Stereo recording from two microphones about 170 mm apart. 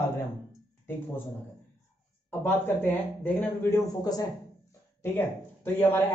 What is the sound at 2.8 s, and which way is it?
A man's voice, 10° left (ahead or behind).